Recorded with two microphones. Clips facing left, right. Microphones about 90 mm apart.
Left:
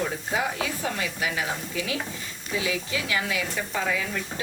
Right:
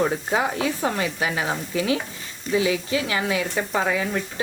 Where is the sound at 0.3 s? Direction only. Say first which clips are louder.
Right 3 dB; 35° right (ahead or behind).